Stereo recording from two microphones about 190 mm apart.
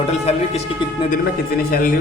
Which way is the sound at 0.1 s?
35° left (ahead or behind).